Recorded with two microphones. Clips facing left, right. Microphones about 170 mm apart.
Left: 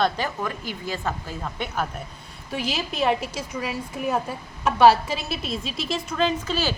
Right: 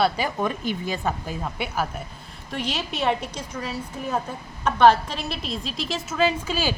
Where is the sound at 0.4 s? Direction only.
20° right (ahead or behind).